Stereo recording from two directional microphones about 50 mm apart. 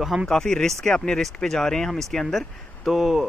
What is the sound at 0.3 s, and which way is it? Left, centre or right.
Speech, centre.